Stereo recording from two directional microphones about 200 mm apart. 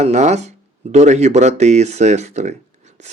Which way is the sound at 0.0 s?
35° right (ahead or behind).